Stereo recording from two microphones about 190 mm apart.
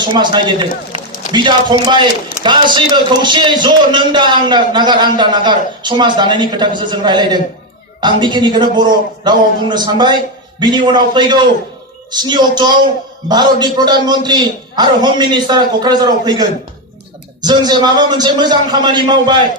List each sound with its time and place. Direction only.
0.0 s a man's voice: 25° right (ahead or behind)